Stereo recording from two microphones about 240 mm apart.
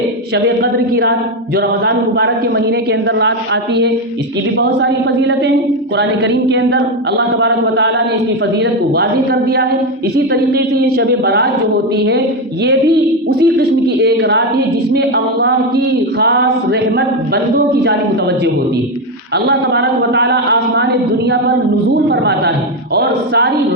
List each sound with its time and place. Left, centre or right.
0.3 s a woman's voice: right
13.4 s a woman's voice: right
19.5 s a woman's voice: right
21.8 s a woman's voice: right